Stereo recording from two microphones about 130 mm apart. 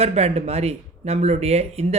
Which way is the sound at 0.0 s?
55° right (ahead or behind).